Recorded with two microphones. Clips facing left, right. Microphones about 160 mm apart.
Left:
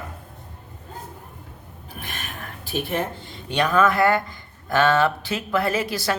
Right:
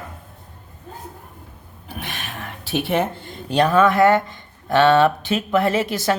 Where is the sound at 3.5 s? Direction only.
35° right (ahead or behind).